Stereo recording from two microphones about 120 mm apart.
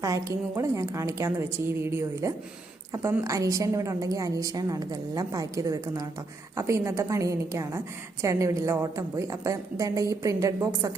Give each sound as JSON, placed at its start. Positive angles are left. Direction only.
{"t": 0.0, "sound": "a woman's voice", "side_deg": -25}